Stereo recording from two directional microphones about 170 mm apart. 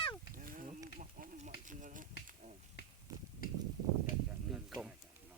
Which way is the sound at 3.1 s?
20° right (ahead or behind).